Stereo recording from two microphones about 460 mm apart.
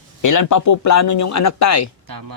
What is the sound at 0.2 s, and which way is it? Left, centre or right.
Speech, left.